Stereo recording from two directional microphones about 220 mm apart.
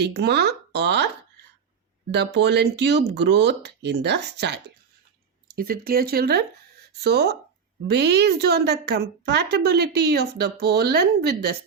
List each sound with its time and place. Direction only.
0.0 s a woman's voice: 50° right (ahead or behind)
2.1 s a woman's voice: 50° right (ahead or behind)